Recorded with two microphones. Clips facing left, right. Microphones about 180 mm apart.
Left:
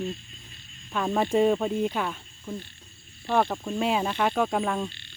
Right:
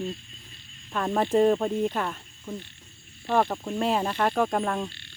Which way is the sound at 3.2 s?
Centre (ahead or behind).